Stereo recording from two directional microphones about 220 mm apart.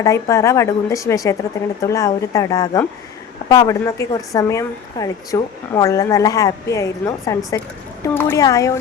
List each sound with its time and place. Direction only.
0.0 s speech: 15° left (ahead or behind)